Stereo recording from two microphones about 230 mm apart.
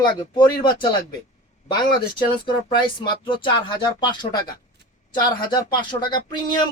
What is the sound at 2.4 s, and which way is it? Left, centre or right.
Speech, left.